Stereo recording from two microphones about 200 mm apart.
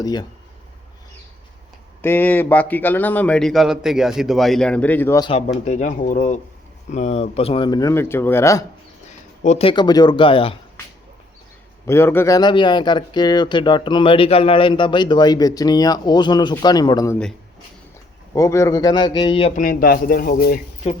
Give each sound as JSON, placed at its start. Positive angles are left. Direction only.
{"t": 0.0, "sound": "speech", "side_deg": 20}
{"t": 2.0, "sound": "speech", "side_deg": 10}
{"t": 5.6, "sound": "speech", "side_deg": 35}
{"t": 9.4, "sound": "speech", "side_deg": 30}
{"t": 11.9, "sound": "speech", "side_deg": 10}
{"t": 18.3, "sound": "speech", "side_deg": 15}
{"t": 19.5, "sound": "speech", "side_deg": 45}